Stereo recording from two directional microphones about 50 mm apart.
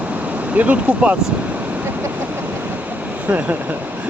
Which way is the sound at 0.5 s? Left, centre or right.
Right.